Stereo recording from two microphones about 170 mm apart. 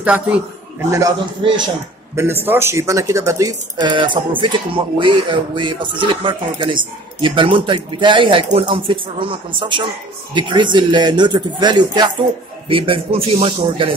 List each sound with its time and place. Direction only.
0.0 s a man's voice: 5° right (ahead or behind)
0.9 s speech: 25° right (ahead or behind)